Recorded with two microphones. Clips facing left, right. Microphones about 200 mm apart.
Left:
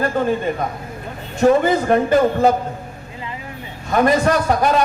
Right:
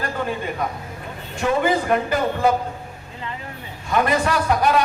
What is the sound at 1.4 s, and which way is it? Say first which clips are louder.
Speech: left 6 dB; 40° left (ahead or behind).